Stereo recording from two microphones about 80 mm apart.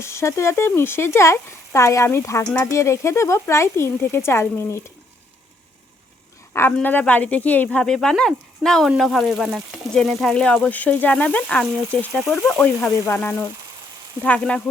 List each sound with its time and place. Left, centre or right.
0.0 s speech: left
6.5 s speech: left; by 9.6 s centre
9.9 s speech: centre
12.1 s speech: centre
12.5 s speech: centre
14.2 s speech: centre